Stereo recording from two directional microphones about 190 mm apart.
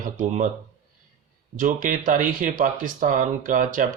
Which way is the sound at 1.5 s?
45° right (ahead or behind).